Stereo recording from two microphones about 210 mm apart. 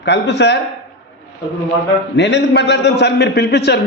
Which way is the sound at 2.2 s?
55° left (ahead or behind).